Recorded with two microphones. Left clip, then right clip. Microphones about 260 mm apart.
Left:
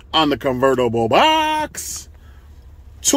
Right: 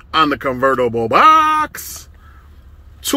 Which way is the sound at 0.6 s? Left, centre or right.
Left.